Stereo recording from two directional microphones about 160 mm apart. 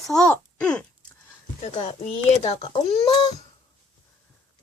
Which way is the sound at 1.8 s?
40° left (ahead or behind).